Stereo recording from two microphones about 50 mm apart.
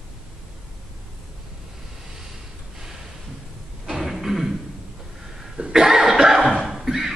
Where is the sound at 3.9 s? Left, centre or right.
Centre.